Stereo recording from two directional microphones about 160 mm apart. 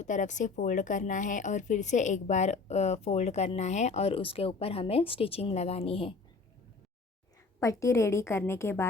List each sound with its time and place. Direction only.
0.0 s speech: 50° left (ahead or behind)
7.6 s a woman's voice: 20° left (ahead or behind)